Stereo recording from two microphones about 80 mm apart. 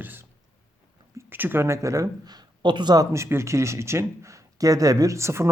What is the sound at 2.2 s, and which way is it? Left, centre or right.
Speech, right.